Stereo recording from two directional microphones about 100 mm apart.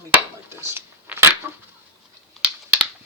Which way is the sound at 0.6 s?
20° right (ahead or behind).